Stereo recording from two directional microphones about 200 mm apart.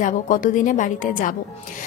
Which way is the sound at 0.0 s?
40° left (ahead or behind).